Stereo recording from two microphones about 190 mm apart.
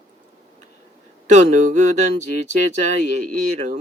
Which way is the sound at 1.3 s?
40° right (ahead or behind).